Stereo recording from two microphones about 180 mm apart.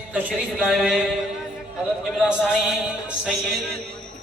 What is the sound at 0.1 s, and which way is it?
Speech, 10° right (ahead or behind).